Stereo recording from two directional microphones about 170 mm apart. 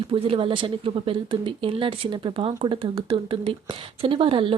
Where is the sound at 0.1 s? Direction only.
35° right (ahead or behind).